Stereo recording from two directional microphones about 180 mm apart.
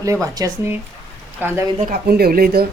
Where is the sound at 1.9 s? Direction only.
55° right (ahead or behind).